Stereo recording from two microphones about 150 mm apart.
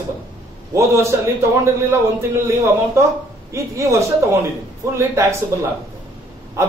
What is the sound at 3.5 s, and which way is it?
Speech, 20° right (ahead or behind).